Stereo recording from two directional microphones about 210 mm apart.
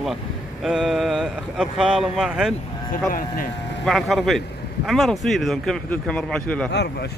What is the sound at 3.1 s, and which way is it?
Speech, 40° left (ahead or behind).